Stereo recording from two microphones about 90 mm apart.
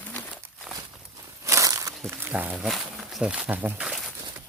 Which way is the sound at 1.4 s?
35° right (ahead or behind).